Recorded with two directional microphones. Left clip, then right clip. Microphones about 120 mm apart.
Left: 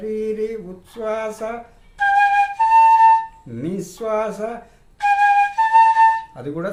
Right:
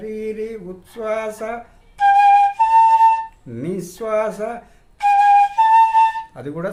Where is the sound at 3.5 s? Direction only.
25° right (ahead or behind).